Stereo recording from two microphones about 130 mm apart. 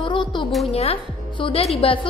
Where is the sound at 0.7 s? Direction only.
50° left (ahead or behind).